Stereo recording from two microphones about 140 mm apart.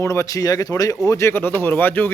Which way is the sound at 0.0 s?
20° left (ahead or behind).